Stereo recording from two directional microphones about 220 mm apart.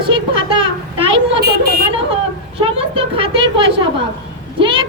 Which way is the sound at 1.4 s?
45° right (ahead or behind).